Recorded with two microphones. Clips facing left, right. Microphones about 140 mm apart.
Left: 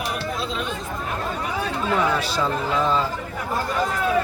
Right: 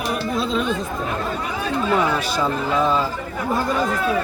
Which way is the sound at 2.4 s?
10° right (ahead or behind).